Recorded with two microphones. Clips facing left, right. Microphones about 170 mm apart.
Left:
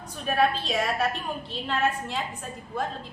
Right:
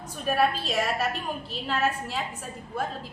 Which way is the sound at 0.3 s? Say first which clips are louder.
Even; 5° right (ahead or behind).